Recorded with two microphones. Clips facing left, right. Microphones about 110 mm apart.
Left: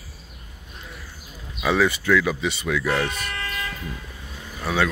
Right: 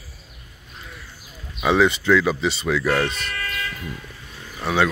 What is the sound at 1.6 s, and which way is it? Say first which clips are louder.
Speech: right 3 dB; 25° right (ahead or behind).